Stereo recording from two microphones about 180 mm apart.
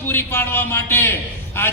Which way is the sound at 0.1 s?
10° left (ahead or behind).